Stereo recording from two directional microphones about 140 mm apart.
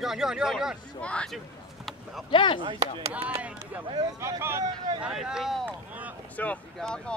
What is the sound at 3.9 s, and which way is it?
Speech, 25° right (ahead or behind).